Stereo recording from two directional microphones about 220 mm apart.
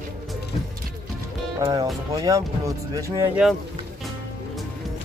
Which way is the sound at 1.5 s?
20° right (ahead or behind).